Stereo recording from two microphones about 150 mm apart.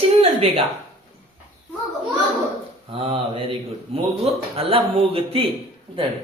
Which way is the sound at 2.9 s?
40° right (ahead or behind).